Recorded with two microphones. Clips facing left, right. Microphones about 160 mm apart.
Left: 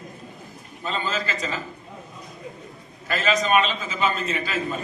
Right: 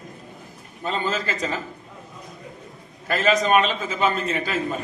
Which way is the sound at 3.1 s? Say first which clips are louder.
Right 3 dB; 50° right (ahead or behind).